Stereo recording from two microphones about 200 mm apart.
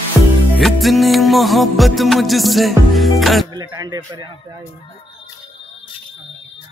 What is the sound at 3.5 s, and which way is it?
Speech, 20° right (ahead or behind).